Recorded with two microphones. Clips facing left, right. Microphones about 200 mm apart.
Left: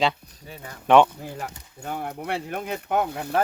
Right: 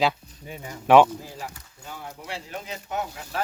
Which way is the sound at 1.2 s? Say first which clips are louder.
Left 3 dB; 60° left (ahead or behind).